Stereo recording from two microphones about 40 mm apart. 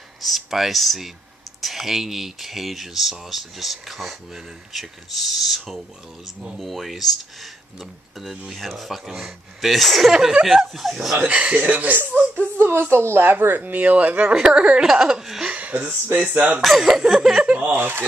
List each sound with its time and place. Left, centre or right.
0.2 s speech: centre
8.5 s speech: centre
11.2 s speech: right
12.4 s speech: right
14.3 s speech: centre
16.1 s speech: right
16.6 s speech: centre
17.5 s a sound: right
17.7 s speech: right